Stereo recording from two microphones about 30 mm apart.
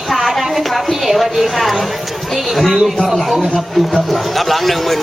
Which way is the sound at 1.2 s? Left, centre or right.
Centre.